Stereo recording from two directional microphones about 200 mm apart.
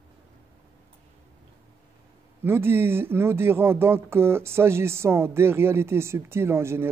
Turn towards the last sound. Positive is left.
turn(degrees=-10)  # may be behind; listen again after turning